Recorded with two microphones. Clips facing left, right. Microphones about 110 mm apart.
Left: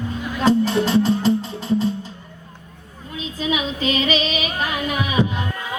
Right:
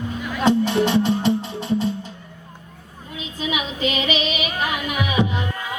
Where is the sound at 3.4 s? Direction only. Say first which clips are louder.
Left 2 dB; 35° left (ahead or behind).